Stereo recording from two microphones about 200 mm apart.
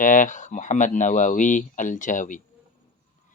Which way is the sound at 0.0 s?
40° left (ahead or behind).